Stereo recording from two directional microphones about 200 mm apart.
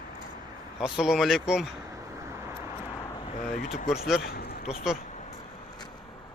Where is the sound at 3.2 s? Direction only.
30° left (ahead or behind).